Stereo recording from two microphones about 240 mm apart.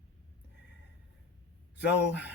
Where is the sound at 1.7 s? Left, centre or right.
Left.